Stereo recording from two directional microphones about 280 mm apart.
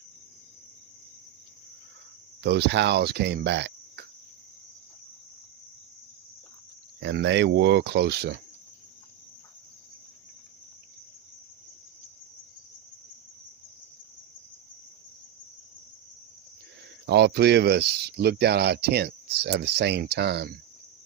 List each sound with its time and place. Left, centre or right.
2.4 s speech: right
7.0 s speech: right
17.0 s speech: right